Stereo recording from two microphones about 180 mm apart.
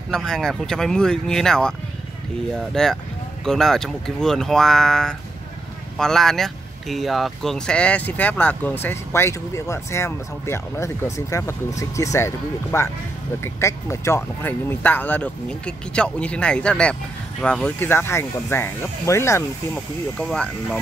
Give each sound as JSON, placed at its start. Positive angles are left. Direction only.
{"t": 0.1, "sound": "speech", "side_deg": 5}